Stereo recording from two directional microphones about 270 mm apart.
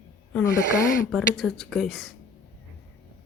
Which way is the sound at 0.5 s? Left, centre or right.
Left.